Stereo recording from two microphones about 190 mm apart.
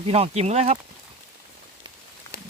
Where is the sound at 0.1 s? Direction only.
35° right (ahead or behind).